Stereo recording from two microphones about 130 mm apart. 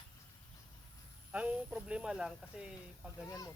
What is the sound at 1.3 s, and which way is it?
Speech, 5° right (ahead or behind).